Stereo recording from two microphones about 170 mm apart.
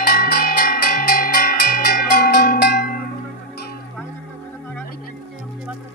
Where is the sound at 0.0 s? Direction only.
65° left (ahead or behind).